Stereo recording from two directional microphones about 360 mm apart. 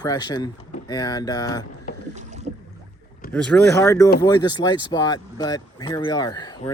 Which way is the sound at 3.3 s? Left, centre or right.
Centre.